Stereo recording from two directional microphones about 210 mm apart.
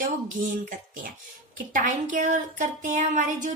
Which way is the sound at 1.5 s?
40° right (ahead or behind).